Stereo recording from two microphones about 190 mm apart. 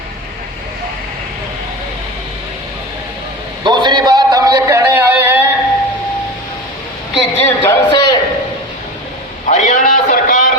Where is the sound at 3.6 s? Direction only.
25° right (ahead or behind).